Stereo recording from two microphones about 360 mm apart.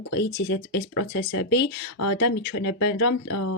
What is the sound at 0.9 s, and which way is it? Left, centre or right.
Speech, left.